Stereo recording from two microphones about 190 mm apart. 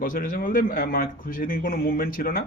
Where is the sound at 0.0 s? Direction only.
45° left (ahead or behind).